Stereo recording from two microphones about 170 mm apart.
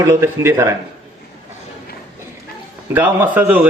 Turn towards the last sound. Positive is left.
turn(degrees=-10)  # may be behind; listen again after turning